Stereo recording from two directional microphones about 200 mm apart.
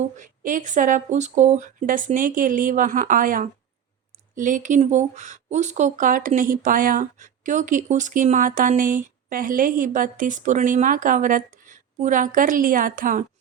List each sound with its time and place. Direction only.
0.2 s speech: 40° right (ahead or behind)